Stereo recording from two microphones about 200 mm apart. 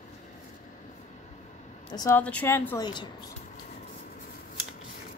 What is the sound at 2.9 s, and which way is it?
Speech, 20° left (ahead or behind).